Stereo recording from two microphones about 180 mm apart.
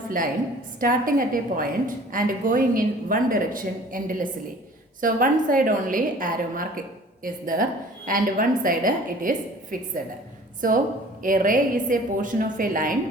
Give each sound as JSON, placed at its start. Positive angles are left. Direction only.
{"t": 0.8, "sound": "a woman's voice", "side_deg": -50}